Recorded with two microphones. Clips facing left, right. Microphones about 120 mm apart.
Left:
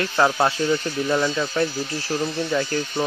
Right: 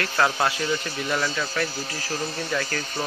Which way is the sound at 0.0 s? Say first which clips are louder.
Left 3 dB; 20° left (ahead or behind).